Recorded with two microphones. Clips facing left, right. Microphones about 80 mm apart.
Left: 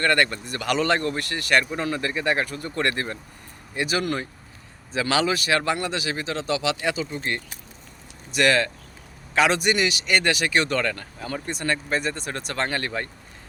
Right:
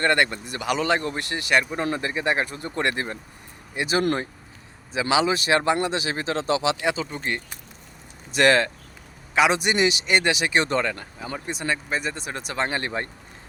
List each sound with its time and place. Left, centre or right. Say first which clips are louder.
0.0 s speech: even; centre
1.0 s speech: left 1 dB; right
4.9 s speech: right 1 dB; centre
9.3 s speech: even; centre